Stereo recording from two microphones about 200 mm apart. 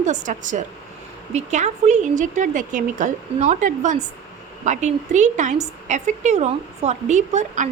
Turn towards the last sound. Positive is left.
turn(degrees=-35)  # may be behind; listen again after turning